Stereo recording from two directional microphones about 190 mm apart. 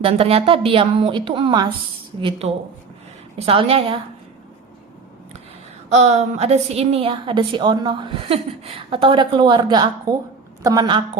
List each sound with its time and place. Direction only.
0.0 s a woman's voice: 30° right (ahead or behind)
6.0 s a woman's voice: 35° right (ahead or behind)